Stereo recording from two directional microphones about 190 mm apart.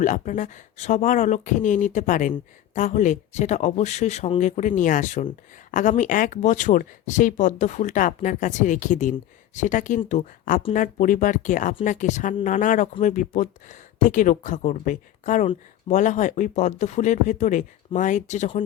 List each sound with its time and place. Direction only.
0.0 s speech: 40° left (ahead or behind)